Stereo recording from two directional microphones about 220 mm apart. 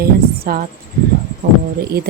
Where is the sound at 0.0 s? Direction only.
40° right (ahead or behind).